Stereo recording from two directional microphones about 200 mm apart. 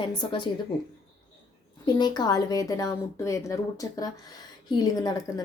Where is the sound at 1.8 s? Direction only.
20° left (ahead or behind).